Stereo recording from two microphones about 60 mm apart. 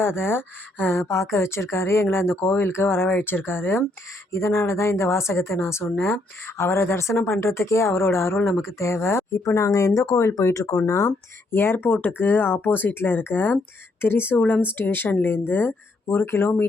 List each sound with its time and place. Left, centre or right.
0.0 s speech: left
1.0 s speech: left
4.3 s speech: left
9.6 s speech: left
11.5 s speech: left